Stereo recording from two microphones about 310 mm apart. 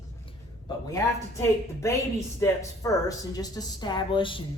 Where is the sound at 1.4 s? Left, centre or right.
Centre.